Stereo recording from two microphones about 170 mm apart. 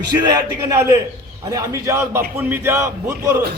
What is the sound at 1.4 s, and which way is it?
A man's voice, 20° right (ahead or behind).